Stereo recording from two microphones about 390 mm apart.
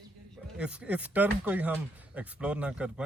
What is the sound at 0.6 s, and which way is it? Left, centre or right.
Speech, centre.